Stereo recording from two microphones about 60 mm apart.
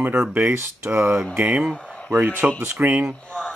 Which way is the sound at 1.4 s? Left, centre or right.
Right.